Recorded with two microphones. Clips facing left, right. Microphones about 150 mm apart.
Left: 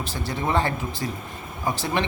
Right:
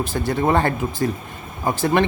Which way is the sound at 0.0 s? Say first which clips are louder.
Right 7 dB; 50° right (ahead or behind).